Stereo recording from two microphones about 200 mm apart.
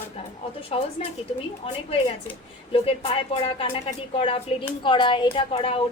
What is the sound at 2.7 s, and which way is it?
Speech, 30° left (ahead or behind).